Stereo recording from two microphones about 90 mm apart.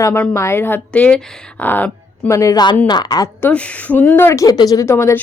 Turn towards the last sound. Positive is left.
turn(degrees=30)  # may be behind; listen again after turning